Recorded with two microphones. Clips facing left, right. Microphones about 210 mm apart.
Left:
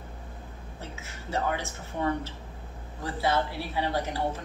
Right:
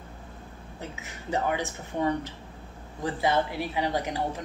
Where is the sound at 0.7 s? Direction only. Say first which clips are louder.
Right 3 dB; 15° right (ahead or behind).